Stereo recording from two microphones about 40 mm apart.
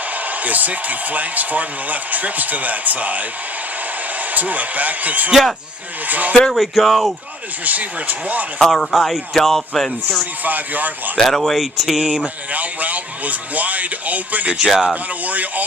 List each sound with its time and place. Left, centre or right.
0.3 s speech: right
4.3 s speech: right
6.5 s speech: centre
7.6 s speech: right
8.5 s speech: centre
10.4 s speech: right
11.2 s speech: centre
11.5 s speech: centre
11.9 s speech: centre
12.2 s speech: right
14.7 s speech: centre
15.2 s speech: right